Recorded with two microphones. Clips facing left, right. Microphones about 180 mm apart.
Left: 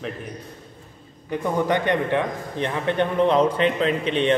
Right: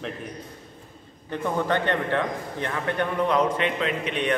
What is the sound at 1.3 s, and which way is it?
A man's voice, 15° left (ahead or behind).